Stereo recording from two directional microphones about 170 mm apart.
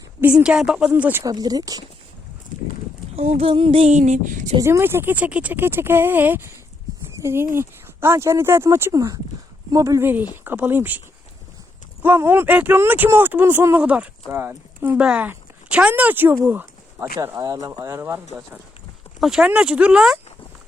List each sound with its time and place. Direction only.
0.2 s speech: 5° right (ahead or behind)
1.2 s speech: 20° right (ahead or behind)
3.2 s speech: 35° right (ahead or behind)
4.6 s speech: 15° right (ahead or behind)
12.0 s speech: 10° right (ahead or behind)
19.2 s speech: 5° right (ahead or behind)